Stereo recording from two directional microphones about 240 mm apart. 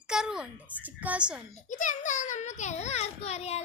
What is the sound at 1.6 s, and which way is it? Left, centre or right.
A child's voice, left.